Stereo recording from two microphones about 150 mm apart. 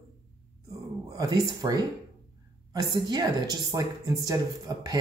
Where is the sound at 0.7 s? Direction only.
20° right (ahead or behind).